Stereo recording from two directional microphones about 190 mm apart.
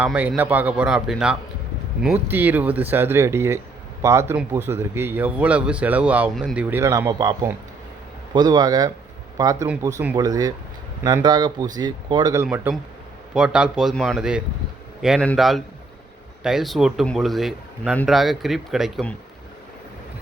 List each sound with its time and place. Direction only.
0.0 s speech: 10° right (ahead or behind)
10.2 s speech: 20° right (ahead or behind); by 19.1 s centre (ahead or behind)